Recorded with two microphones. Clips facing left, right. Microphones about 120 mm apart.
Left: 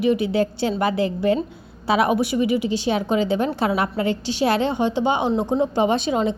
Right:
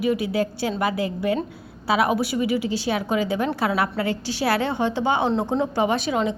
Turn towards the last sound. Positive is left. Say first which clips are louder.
# left 2 dB
turn(degrees=25)  # may be behind; listen again after turning